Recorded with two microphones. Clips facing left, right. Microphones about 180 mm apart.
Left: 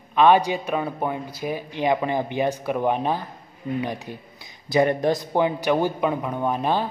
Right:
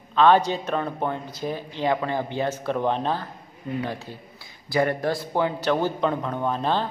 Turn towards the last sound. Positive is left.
turn(degrees=15)  # may be behind; listen again after turning